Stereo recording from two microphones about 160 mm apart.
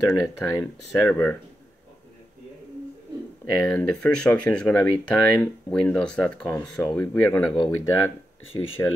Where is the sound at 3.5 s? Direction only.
5° left (ahead or behind).